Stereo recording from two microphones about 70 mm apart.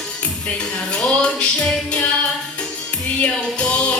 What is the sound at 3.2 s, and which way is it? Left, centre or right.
Music, centre.